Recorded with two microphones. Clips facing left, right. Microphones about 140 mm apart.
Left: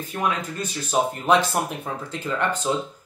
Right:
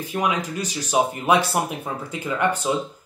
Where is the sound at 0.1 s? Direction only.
15° right (ahead or behind).